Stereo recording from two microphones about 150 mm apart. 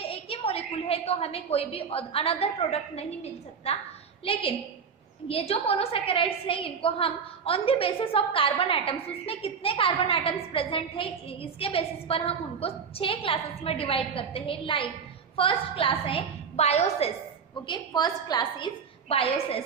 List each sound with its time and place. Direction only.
0.0 s a woman's voice: 40° left (ahead or behind)
17.7 s a woman's voice: 25° left (ahead or behind)
19.0 s a woman's voice: 40° left (ahead or behind)